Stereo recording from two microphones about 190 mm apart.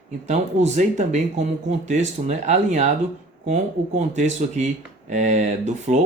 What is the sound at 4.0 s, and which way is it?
Speech, 40° right (ahead or behind).